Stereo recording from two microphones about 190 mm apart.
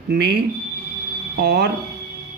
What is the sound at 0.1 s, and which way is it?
Speech, 60° right (ahead or behind).